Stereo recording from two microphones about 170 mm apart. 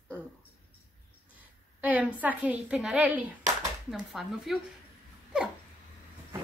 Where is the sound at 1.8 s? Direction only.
10° right (ahead or behind).